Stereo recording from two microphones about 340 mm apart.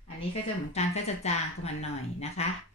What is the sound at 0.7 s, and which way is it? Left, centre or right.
Speech, centre.